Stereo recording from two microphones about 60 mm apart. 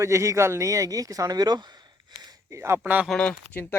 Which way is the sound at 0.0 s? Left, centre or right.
Right.